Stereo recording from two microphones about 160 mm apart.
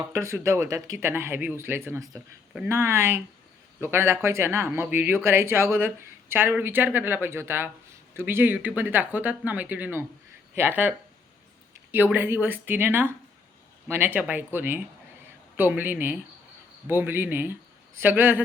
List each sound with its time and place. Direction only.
0.1 s speech: 15° right (ahead or behind)